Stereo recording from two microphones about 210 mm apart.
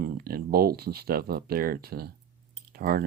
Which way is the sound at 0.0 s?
45° right (ahead or behind).